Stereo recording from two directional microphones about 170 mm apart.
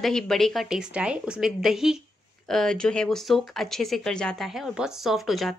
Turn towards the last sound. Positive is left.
turn(degrees=0)  # may be behind; listen again after turning